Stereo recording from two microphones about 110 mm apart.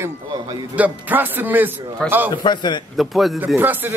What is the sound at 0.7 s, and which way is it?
A man's voice, 15° right (ahead or behind).